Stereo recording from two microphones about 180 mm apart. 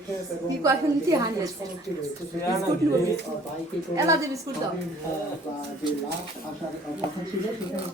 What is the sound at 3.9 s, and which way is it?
Speech, 15° right (ahead or behind).